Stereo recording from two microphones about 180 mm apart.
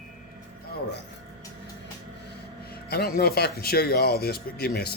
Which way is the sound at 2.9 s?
60° left (ahead or behind).